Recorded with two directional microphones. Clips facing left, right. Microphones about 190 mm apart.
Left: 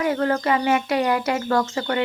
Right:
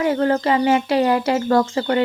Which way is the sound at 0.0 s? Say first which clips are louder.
Right 3 dB; 30° right (ahead or behind).